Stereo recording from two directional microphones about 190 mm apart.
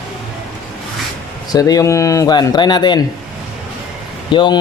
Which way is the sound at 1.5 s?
20° left (ahead or behind).